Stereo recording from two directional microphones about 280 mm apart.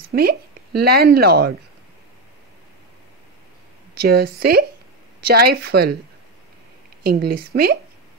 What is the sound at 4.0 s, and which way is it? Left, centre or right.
Speech, right.